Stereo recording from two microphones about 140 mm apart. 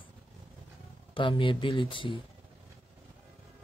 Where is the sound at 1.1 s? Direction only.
35° left (ahead or behind).